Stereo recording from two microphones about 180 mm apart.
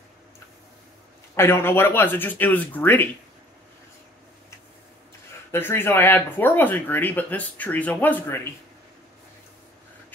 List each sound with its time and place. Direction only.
1.3 s speech: 15° left (ahead or behind)
5.5 s speech: 10° left (ahead or behind)